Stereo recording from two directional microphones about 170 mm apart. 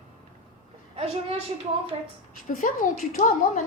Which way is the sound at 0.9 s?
35° right (ahead or behind).